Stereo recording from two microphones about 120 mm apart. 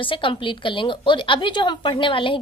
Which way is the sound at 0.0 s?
45° left (ahead or behind).